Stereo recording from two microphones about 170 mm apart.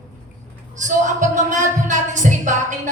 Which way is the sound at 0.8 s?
45° right (ahead or behind).